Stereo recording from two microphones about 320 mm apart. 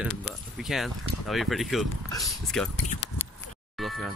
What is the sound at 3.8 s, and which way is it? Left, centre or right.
Music, centre.